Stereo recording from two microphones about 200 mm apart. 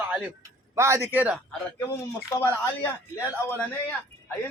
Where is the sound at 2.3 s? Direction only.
10° left (ahead or behind).